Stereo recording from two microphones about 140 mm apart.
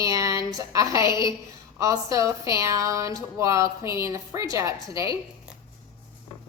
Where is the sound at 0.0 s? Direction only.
25° right (ahead or behind).